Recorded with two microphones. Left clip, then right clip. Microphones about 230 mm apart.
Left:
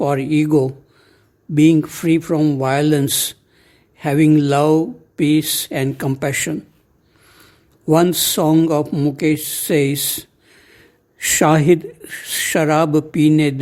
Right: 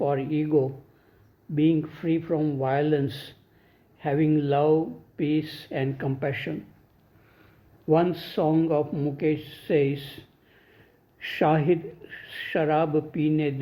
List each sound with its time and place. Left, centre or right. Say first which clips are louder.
0.0 s speech: left 8 dB; left
7.9 s speech: left 8 dB; left